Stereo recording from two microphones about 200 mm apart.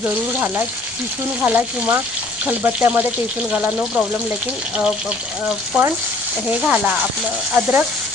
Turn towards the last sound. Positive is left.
turn(degrees=-10)  # may be behind; listen again after turning